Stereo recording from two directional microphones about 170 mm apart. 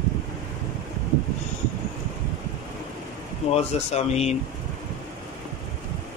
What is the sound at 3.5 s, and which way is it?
Speech, 40° left (ahead or behind).